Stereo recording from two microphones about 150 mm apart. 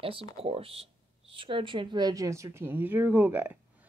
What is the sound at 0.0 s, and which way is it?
Speech, 40° right (ahead or behind).